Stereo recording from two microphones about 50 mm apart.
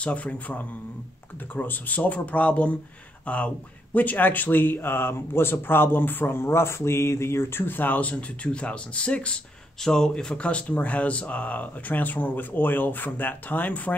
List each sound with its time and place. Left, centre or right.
0.0 s a man's voice: left
9.8 s speech: centre
10.4 s speech: left